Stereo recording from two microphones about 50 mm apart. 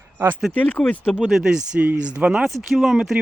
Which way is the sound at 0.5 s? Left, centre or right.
Left.